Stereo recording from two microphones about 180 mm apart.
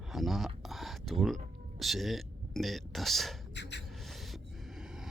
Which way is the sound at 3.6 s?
75° left (ahead or behind).